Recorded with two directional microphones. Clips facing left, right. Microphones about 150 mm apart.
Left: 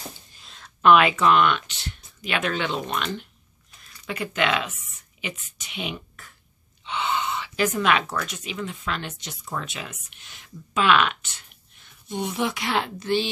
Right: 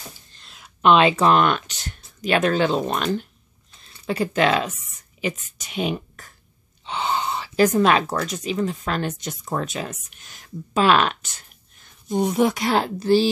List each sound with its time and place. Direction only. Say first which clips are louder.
0.3 s a sound: even; 5° left (ahead or behind)
0.8 s speech: right 1 dB; 30° right (ahead or behind)
3.8 s a woman's voice: right 7 dB; 30° right (ahead or behind)